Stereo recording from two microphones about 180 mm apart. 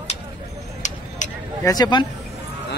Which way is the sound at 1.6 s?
20° left (ahead or behind).